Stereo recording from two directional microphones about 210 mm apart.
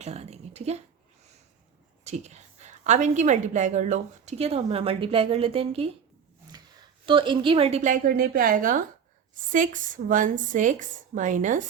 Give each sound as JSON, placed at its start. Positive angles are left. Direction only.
{"t": 0.0, "sound": "a woman's voice", "side_deg": -30}
{"t": 2.0, "sound": "a woman's voice", "side_deg": -30}
{"t": 7.0, "sound": "a woman's voice", "side_deg": -25}